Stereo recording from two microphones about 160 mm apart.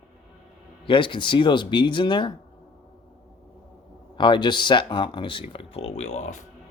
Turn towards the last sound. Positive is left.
turn(degrees=45)  # may be behind; listen again after turning